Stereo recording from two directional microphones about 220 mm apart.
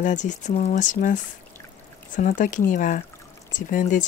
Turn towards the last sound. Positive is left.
turn(degrees=35)  # may be behind; listen again after turning